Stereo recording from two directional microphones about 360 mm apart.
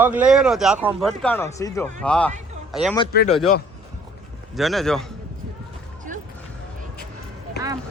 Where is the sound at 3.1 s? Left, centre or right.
Left.